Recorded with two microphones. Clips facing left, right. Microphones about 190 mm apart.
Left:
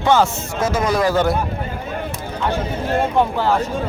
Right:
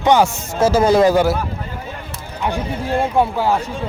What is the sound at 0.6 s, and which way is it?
Speech, 30° right (ahead or behind).